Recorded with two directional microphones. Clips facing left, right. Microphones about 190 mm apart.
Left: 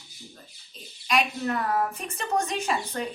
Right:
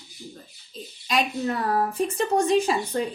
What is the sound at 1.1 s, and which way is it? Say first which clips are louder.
A woman's voice: right 1 dB; 30° right (ahead or behind).